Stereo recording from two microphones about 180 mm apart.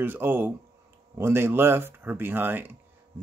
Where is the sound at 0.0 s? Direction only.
10° right (ahead or behind).